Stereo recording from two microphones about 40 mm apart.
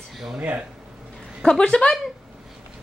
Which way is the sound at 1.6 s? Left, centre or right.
Left.